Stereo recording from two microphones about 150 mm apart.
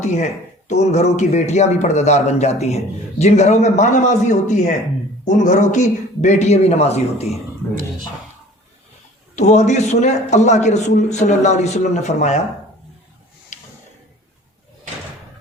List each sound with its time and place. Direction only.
0.0 s a man's voice: 50° left (ahead or behind)
9.3 s a man's voice: 50° left (ahead or behind)
13.5 s a sound: 55° left (ahead or behind)